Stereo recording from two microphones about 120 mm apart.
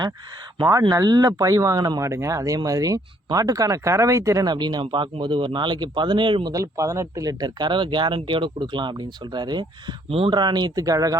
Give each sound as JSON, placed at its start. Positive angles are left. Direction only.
{"t": 0.6, "sound": "speech", "side_deg": -35}
{"t": 6.5, "sound": "speech", "side_deg": -25}